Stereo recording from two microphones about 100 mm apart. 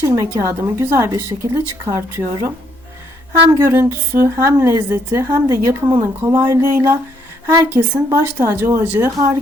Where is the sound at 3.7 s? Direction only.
25° right (ahead or behind).